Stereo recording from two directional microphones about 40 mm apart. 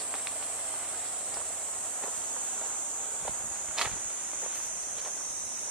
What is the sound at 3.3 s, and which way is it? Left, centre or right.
Walk, centre.